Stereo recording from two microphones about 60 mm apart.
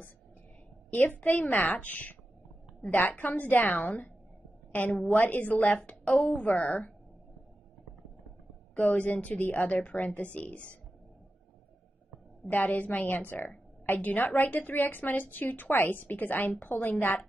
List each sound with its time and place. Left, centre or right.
0.8 s a woman's voice: left
8.7 s a woman's voice: left
12.4 s a woman's voice: left